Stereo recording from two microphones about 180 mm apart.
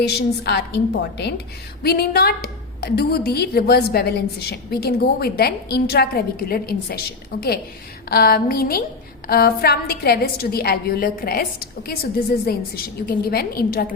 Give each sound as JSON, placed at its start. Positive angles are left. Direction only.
{"t": 0.0, "sound": "a woman's voice", "side_deg": 65}